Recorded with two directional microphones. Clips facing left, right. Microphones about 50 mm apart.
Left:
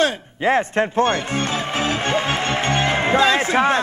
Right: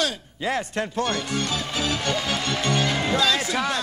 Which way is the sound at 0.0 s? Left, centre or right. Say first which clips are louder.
Left 7 dB; left.